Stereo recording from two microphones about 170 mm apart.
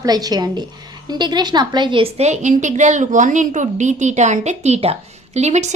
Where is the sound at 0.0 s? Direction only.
20° right (ahead or behind).